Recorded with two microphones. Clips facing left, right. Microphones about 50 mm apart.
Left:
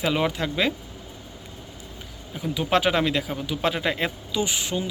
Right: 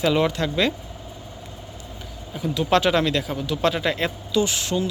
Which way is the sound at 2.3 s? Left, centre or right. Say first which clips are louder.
Right 3 dB; centre.